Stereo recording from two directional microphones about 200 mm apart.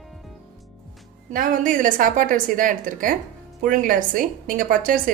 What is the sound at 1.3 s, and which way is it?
A woman's voice, 45° right (ahead or behind).